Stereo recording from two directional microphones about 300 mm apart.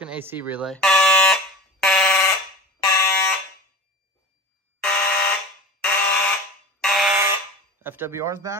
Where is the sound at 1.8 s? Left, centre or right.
Centre.